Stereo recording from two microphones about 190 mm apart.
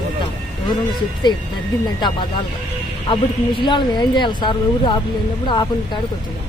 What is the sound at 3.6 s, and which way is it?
Speech, 25° left (ahead or behind).